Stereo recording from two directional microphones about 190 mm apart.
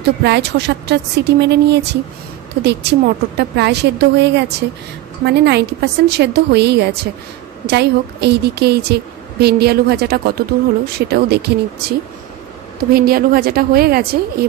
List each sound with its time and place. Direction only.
0.0 s a woman's voice: 60° right (ahead or behind)
12.9 s a woman's voice: 50° right (ahead or behind)